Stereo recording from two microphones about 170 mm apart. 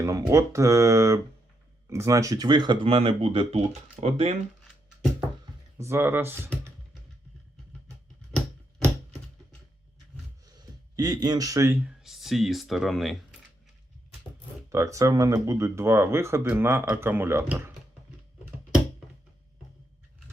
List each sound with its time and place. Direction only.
0.0 s speech: 20° right (ahead or behind); by 4.4 s 35° right (ahead or behind)
5.7 s speech: 15° right (ahead or behind)
10.9 s speech: 25° right (ahead or behind)
11.9 s speech: centre (ahead or behind)
14.7 s speech: 20° right (ahead or behind)